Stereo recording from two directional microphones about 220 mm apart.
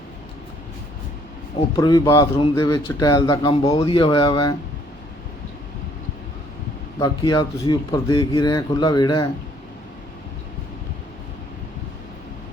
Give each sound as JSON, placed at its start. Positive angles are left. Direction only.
{"t": 1.7, "sound": "a man's voice", "side_deg": 20}
{"t": 7.0, "sound": "speech", "side_deg": 20}